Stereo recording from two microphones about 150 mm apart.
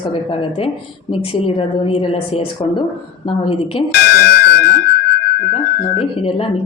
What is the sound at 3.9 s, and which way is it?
Music, 90° left.